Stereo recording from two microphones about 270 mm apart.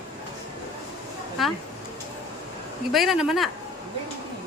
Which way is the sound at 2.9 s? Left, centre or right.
Centre.